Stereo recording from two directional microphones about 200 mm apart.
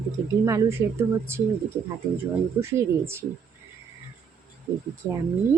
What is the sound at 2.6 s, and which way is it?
Speech, 15° right (ahead or behind).